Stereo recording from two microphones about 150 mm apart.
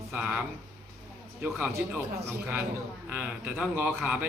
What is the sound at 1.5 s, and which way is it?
A man's voice, 10° right (ahead or behind).